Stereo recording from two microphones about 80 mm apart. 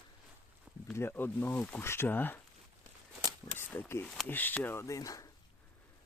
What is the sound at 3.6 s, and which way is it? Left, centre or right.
Speech, left.